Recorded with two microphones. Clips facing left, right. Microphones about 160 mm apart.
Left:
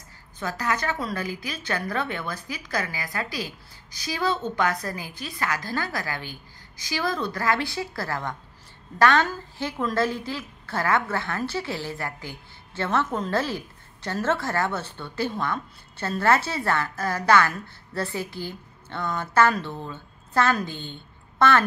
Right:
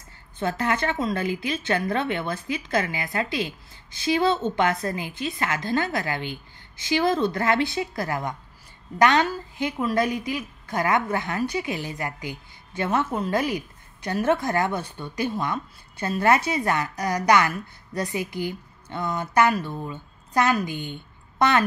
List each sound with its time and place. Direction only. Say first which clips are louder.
0.4 s a woman's voice: right 3 dB; 25° right (ahead or behind)